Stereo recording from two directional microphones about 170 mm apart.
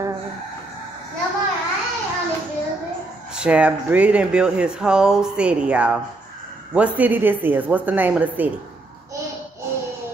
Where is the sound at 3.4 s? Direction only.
5° right (ahead or behind).